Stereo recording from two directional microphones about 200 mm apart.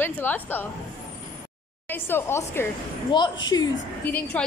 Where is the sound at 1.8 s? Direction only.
10° left (ahead or behind).